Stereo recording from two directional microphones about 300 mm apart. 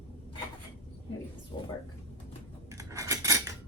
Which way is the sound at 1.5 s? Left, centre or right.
Centre.